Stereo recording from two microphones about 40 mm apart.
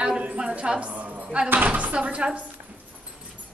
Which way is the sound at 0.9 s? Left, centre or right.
Right.